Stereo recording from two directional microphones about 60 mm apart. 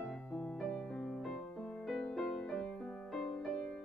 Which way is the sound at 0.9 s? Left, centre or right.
Centre.